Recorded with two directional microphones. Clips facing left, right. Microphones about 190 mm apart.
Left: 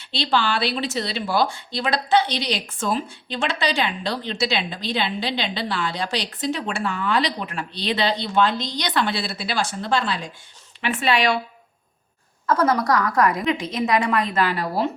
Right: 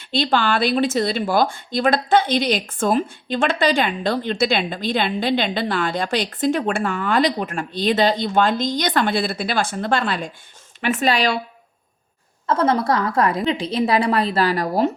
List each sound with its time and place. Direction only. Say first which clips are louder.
0.0 s speech: right 3 dB; 50° right (ahead or behind)
10.8 s a woman's voice: right 2 dB; 40° right (ahead or behind)
12.5 s a woman's voice: right 1 dB; 25° right (ahead or behind); by 14.8 s 40° right (ahead or behind)